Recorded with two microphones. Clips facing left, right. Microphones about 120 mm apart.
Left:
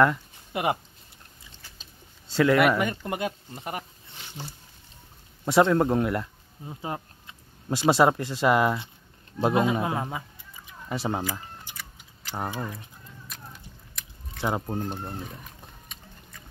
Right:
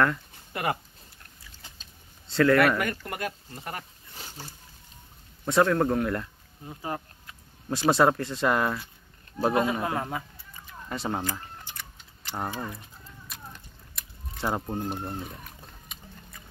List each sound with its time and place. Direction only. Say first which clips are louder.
0.0 s a sound: left 4 dB; 15° left (ahead or behind)
2.3 s speech: even; 15° left (ahead or behind)
5.4 s speech: left 2 dB; 20° left (ahead or behind)
9.4 s a sound: left 2 dB; 20° left (ahead or behind)
12.3 s speech: left 1 dB; 5° left (ahead or behind)
13.3 s biting: right 1 dB; centre (ahead or behind)
14.8 s speech: even; 5° right (ahead or behind)
15.9 s boat: right 1 dB; 5° right (ahead or behind)